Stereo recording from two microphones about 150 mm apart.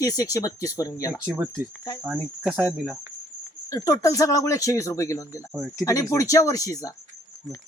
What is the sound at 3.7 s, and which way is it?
Speech, 25° left (ahead or behind).